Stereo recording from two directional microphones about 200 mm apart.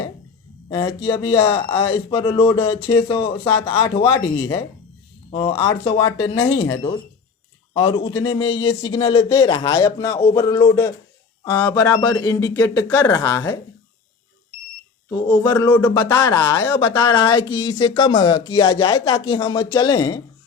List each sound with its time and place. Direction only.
0.7 s speech: 25° left (ahead or behind)
5.8 s speech: 25° left (ahead or behind)
7.7 s speech: 25° left (ahead or behind)
15.4 s speech: 10° left (ahead or behind)